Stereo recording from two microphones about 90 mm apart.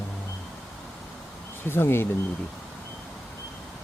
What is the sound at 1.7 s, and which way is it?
Speech, 25° left (ahead or behind).